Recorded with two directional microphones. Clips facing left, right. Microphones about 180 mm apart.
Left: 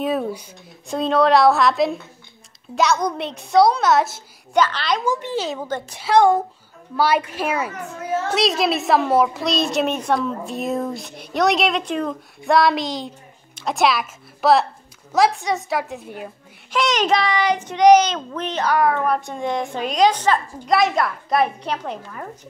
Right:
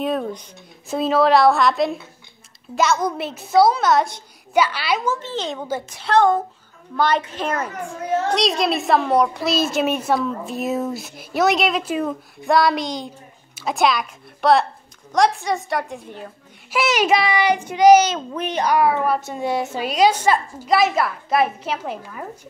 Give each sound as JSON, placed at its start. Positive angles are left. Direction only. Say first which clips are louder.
{"t": 0.0, "sound": "a woman's voice", "louder": "left 1 dB", "side_deg": 5}
{"t": 4.6, "sound": "a child's voice", "louder": "even", "side_deg": -10}
{"t": 5.0, "sound": "a child's voice", "louder": "left 2 dB", "side_deg": 15}
{"t": 16.7, "sound": "a child's voice", "louder": "right 1 dB", "side_deg": -10}